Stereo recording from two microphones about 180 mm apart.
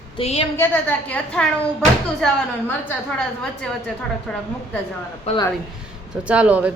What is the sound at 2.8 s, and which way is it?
Speech, 5° left (ahead or behind).